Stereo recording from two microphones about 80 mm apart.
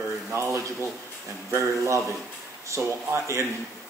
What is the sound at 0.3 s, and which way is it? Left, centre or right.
Speech, right.